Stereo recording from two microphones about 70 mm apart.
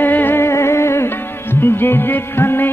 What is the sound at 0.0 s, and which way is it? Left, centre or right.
Music, left.